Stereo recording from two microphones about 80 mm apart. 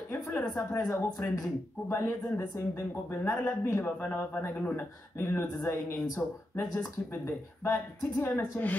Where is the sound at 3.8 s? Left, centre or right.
Left.